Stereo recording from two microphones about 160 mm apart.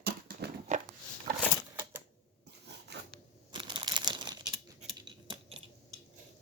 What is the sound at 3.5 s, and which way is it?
Crumpling, 30° right (ahead or behind).